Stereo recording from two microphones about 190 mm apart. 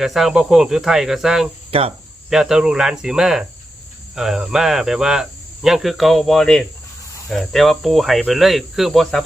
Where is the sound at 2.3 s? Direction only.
5° right (ahead or behind).